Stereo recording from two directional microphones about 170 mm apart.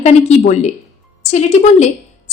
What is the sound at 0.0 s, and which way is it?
A woman's voice, 40° left (ahead or behind).